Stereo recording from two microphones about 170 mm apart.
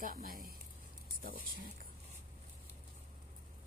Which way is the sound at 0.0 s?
55° right (ahead or behind).